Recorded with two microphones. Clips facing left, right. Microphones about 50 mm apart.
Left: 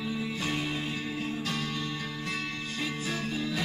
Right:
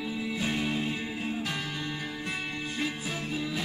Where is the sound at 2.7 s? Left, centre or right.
Centre.